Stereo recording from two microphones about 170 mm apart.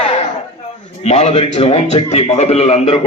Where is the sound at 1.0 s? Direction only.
40° left (ahead or behind).